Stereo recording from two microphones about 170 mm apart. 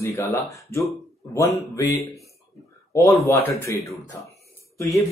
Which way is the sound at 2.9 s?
15° left (ahead or behind).